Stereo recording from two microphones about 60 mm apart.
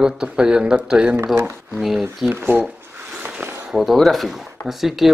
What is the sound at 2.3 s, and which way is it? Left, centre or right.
Speech, right.